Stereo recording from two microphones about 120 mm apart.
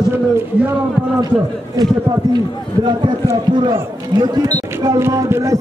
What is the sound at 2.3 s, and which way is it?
Speech, 35° right (ahead or behind).